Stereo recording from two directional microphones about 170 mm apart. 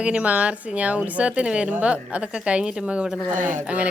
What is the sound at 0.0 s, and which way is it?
A woman's voice, 5° right (ahead or behind).